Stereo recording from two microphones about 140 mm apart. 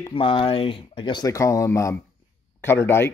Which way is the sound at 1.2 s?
25° left (ahead or behind).